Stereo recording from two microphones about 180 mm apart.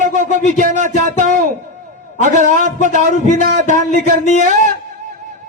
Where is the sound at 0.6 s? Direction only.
45° right (ahead or behind).